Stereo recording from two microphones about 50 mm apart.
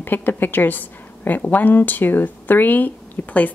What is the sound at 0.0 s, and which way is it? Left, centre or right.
Speech, left.